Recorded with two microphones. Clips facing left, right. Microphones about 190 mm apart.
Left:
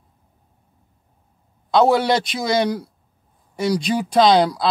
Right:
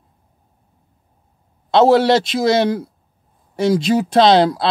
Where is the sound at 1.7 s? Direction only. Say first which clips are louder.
Right 4 dB; 25° right (ahead or behind).